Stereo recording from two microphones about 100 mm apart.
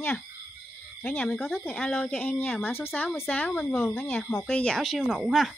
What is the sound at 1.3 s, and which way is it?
Speech, 5° left (ahead or behind).